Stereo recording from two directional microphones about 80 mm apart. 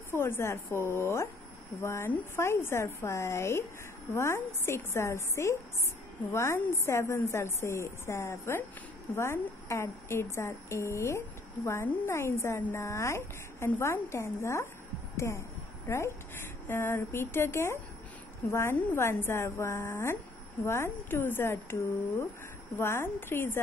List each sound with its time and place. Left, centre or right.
0.1 s a woman's voice: left
22.8 s a woman's voice: left